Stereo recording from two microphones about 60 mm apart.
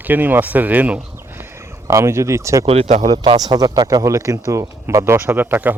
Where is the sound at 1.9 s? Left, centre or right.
Right.